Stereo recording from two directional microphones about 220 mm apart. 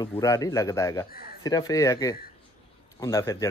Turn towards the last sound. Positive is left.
turn(degrees=15)  # may be behind; listen again after turning